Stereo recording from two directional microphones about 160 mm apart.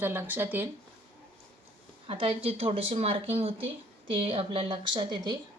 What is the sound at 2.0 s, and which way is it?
Speech, 35° right (ahead or behind).